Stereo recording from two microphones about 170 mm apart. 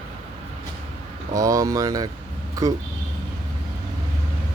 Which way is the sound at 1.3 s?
20° right (ahead or behind).